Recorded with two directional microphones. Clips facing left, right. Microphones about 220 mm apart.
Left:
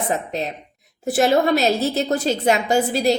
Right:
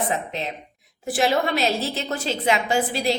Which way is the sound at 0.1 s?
40° left (ahead or behind).